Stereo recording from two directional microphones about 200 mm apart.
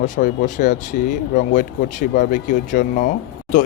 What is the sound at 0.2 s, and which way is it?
Speech, 40° left (ahead or behind).